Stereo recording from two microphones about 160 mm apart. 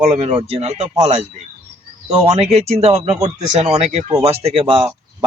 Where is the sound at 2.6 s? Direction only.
40° right (ahead or behind).